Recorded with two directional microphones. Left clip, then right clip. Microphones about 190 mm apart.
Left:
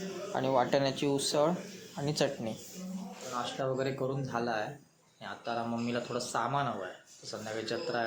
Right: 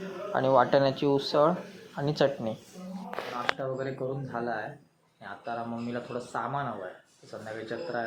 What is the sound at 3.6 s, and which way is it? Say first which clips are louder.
Speech: even; 5° left (ahead or behind).